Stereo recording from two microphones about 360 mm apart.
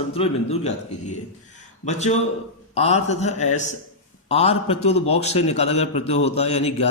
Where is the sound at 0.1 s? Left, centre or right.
Centre.